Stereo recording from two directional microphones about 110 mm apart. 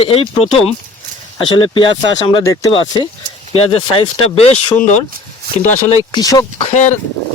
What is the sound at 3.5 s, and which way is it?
Speech, 60° left (ahead or behind).